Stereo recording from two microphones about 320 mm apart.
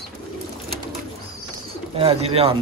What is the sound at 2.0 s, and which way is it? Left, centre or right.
Speech, centre.